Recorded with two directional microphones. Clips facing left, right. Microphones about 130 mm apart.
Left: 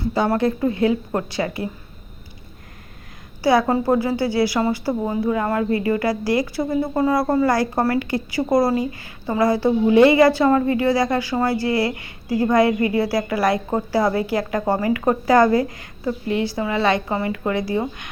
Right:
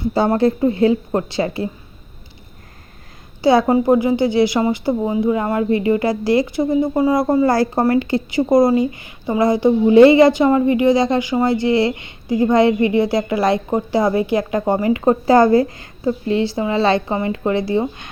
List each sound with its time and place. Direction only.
0.1 s a woman's voice: 30° right (ahead or behind)
3.4 s a woman's voice: 25° right (ahead or behind)